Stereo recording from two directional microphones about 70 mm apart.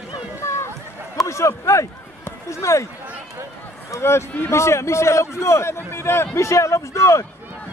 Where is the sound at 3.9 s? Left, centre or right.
Left.